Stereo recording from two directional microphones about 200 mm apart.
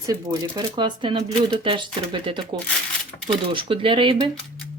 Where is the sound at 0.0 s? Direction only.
20° right (ahead or behind).